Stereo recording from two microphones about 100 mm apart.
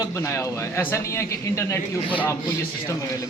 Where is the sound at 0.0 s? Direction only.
30° left (ahead or behind).